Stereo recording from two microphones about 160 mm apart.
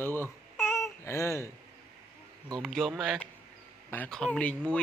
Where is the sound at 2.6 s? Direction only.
Centre (ahead or behind).